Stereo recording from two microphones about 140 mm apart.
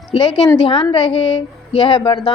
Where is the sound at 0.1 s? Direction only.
35° left (ahead or behind).